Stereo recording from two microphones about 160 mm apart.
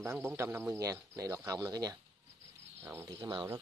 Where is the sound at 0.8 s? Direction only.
20° right (ahead or behind).